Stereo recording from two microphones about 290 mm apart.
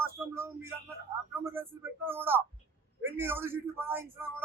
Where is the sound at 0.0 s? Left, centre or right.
Centre.